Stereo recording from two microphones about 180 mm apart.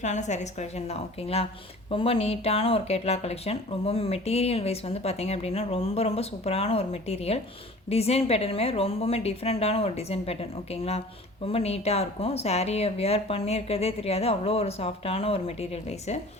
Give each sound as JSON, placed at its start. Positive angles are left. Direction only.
{"t": 0.0, "sound": "speech", "side_deg": 40}
{"t": 11.4, "sound": "speech", "side_deg": 35}